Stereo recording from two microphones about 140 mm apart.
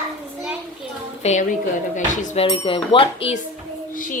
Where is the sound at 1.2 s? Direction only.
55° left (ahead or behind).